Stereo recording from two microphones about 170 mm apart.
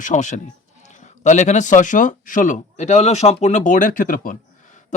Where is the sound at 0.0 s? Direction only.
45° left (ahead or behind).